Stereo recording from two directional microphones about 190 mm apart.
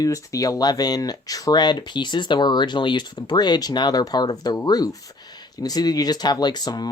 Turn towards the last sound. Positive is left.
turn(degrees=20)  # may be behind; listen again after turning